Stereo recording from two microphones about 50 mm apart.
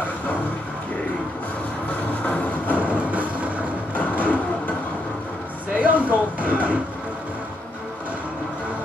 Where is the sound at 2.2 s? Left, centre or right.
Left.